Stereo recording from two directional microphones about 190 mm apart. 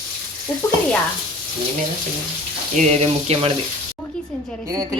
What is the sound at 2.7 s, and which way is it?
Speech, 35° right (ahead or behind).